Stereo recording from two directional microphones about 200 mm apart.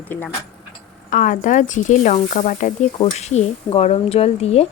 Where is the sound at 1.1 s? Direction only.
40° left (ahead or behind).